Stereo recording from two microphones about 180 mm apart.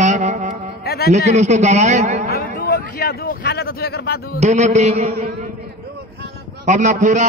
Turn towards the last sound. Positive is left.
turn(degrees=-45)  # may be behind; listen again after turning